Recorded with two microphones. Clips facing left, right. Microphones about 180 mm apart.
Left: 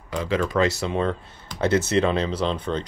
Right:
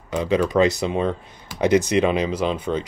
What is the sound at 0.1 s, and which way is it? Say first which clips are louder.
Speech: right 4 dB; 20° right (ahead or behind).